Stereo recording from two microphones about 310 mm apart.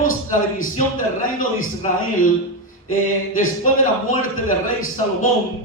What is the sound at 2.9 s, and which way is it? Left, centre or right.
Speech, left.